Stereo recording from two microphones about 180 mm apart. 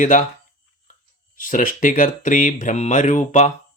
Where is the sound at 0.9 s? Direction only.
45° left (ahead or behind).